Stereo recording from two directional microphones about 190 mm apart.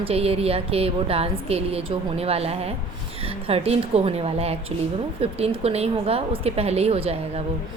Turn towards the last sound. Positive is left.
turn(degrees=-35)  # may be behind; listen again after turning